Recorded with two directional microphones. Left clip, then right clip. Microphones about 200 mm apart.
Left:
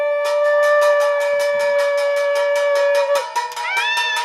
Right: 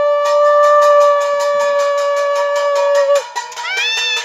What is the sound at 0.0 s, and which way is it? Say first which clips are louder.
Wind instrument: right 5 dB; 45° right (ahead or behind).